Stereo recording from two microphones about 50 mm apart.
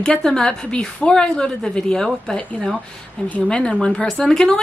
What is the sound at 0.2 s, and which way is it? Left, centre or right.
Speech, centre.